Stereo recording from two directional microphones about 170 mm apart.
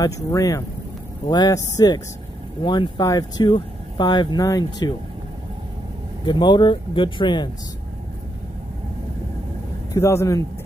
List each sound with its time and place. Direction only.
0.0 s speech: 20° left (ahead or behind)
6.2 s speech: 25° left (ahead or behind)
9.9 s speech: 15° left (ahead or behind)